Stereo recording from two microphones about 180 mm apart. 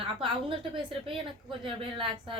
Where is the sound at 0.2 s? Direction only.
30° right (ahead or behind).